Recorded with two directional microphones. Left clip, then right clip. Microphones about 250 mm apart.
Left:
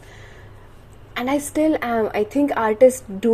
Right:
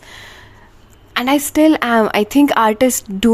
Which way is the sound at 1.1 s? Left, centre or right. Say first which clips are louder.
Right 7 dB; right.